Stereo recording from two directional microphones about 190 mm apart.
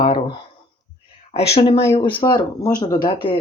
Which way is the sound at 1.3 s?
35° left (ahead or behind).